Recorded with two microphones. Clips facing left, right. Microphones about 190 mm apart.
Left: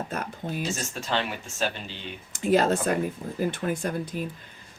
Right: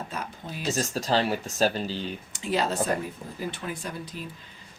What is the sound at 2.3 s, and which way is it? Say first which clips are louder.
Speech: left 6 dB; 50° left (ahead or behind).